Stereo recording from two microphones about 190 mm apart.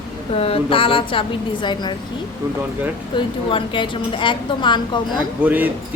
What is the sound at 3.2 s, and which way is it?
A woman's voice, 25° left (ahead or behind).